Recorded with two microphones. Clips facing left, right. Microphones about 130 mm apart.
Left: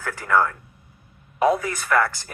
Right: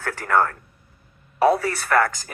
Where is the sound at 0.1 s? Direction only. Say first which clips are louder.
Even; 40° right (ahead or behind).